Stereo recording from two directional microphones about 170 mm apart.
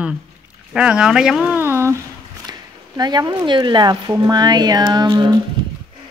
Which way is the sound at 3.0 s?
25° right (ahead or behind).